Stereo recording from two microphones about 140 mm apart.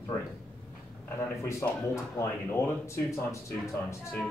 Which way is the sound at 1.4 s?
20° left (ahead or behind).